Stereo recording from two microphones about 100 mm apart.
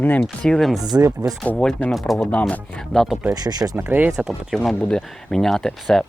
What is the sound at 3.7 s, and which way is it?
Speech, 20° right (ahead or behind).